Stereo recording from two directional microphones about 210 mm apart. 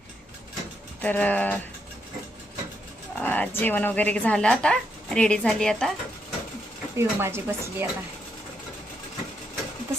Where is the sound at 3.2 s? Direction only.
10° left (ahead or behind).